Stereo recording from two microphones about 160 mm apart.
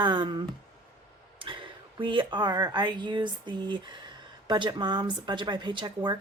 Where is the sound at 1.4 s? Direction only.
35° right (ahead or behind).